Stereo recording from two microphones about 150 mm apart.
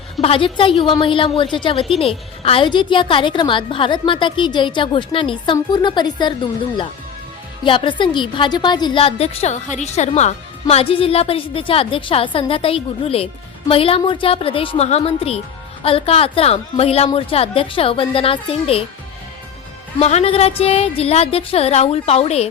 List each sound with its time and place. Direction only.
0.2 s a woman's voice: 40° left (ahead or behind)
7.6 s a woman's voice: 30° left (ahead or behind)
20.0 s a woman's voice: 45° left (ahead or behind)